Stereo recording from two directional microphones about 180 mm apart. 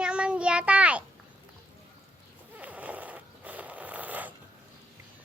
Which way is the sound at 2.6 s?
10° right (ahead or behind).